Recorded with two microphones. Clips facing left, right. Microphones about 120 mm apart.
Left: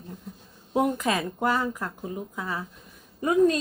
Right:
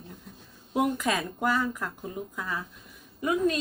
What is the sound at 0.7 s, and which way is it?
Speech, 25° left (ahead or behind).